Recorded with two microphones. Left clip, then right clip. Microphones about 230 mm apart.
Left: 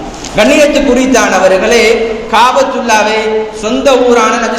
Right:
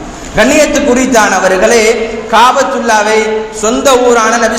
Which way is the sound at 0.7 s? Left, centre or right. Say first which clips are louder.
Even; right.